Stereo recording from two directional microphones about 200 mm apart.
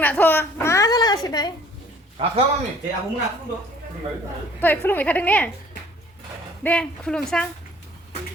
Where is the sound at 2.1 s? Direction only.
30° right (ahead or behind).